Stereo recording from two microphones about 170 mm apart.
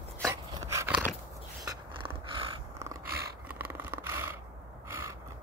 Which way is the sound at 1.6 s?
30° right (ahead or behind).